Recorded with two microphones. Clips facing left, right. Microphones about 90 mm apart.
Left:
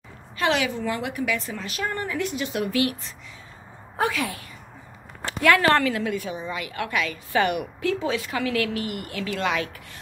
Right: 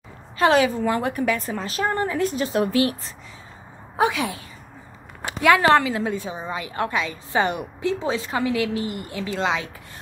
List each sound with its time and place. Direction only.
0.4 s a woman's voice: 35° right (ahead or behind)
3.9 s a woman's voice: 15° right (ahead or behind)
5.9 s a woman's voice: 25° right (ahead or behind)